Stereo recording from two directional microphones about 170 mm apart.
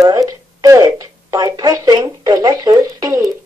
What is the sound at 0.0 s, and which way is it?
A woman's voice, 20° right (ahead or behind).